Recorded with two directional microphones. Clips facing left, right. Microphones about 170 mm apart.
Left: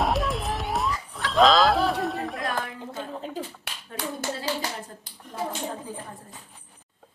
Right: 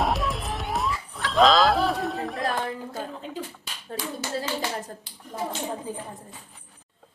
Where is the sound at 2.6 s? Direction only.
40° right (ahead or behind).